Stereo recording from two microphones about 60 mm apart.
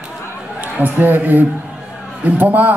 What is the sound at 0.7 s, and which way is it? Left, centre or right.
A man's voice, right.